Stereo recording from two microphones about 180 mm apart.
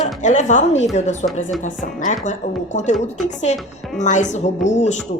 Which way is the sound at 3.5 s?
35° left (ahead or behind).